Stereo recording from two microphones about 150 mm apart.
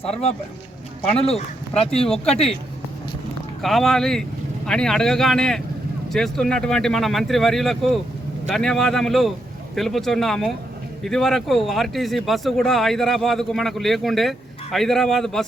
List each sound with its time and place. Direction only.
1.8 s speech: 40° left (ahead or behind)
2.0 s speech: 5° left (ahead or behind)
3.6 s speech: centre (ahead or behind)